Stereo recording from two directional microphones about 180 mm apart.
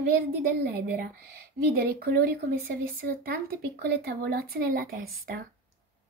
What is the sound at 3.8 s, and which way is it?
Speech, 55° right (ahead or behind).